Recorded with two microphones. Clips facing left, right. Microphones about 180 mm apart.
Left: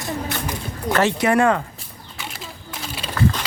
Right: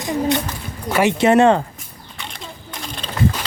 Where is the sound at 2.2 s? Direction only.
5° left (ahead or behind).